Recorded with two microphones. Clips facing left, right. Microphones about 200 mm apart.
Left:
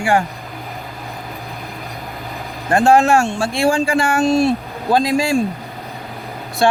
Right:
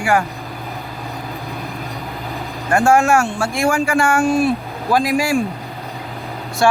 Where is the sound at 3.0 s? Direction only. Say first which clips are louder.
Left 1 dB; 30° left (ahead or behind).